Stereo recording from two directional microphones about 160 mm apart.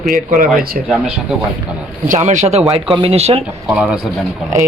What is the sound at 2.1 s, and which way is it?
Speech, 50° right (ahead or behind).